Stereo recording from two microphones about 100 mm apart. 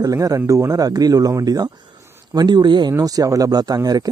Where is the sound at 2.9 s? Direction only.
35° right (ahead or behind).